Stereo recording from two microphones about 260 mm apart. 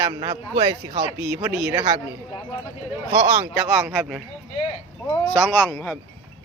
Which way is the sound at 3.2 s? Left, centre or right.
Centre.